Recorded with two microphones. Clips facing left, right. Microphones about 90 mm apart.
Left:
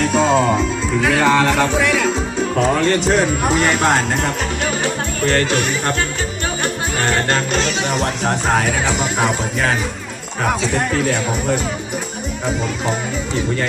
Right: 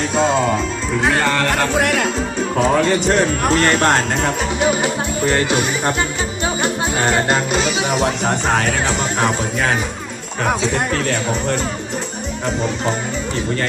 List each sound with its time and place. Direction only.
0.1 s music: centre (ahead or behind)
1.2 s speech: 10° left (ahead or behind)
1.8 s music: 55° right (ahead or behind)
2.6 s speech: centre (ahead or behind)
4.6 s speech: 15° right (ahead or behind); by 11.6 s 5° left (ahead or behind)